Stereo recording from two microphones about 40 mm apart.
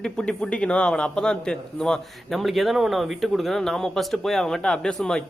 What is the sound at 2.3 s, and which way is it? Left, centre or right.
A man's voice, centre.